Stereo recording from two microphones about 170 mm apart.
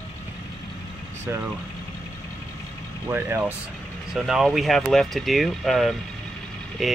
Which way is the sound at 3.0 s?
15° right (ahead or behind).